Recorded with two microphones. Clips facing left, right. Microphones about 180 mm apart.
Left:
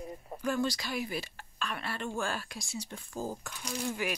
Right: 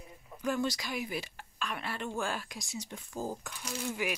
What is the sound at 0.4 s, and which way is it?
Speech, 15° right (ahead or behind).